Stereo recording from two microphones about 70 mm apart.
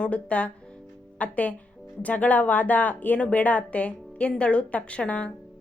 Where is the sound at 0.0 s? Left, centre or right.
Centre.